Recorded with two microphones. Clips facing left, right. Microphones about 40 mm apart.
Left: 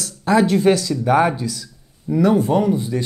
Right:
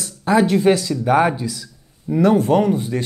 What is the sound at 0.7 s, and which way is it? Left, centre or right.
Speech, right.